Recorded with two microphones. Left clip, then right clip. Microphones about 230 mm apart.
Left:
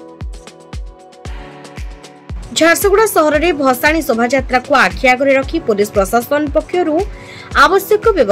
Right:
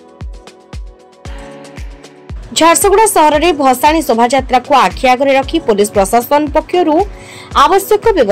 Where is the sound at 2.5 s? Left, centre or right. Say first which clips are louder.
Right 2 dB; centre.